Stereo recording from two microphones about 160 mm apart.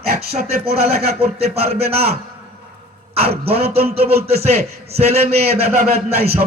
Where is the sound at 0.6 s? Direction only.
75° right (ahead or behind).